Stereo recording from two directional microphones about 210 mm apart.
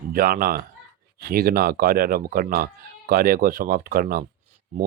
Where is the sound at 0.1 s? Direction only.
45° right (ahead or behind).